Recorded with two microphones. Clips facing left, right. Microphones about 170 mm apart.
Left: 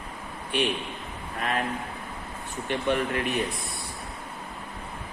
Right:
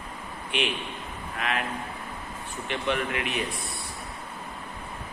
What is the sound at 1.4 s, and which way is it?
Speech, 40° left (ahead or behind).